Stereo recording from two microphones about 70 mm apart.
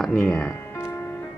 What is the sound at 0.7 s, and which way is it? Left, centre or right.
Music, left.